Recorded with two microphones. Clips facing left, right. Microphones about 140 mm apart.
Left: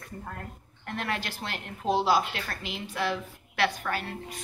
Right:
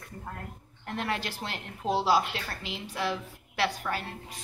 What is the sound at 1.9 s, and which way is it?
Speech, 5° right (ahead or behind).